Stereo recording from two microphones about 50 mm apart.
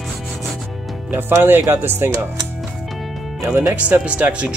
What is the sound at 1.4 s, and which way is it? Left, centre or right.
Speech, right.